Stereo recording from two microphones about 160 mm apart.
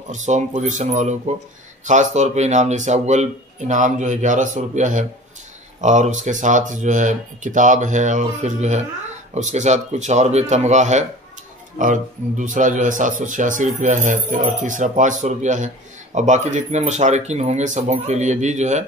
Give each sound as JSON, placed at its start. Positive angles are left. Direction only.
{"t": 0.1, "sound": "speech", "side_deg": -50}